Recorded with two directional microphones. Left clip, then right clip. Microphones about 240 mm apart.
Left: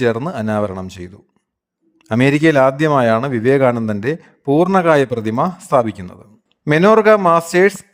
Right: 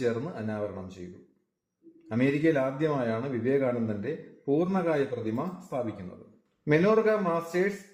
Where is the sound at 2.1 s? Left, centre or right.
Left.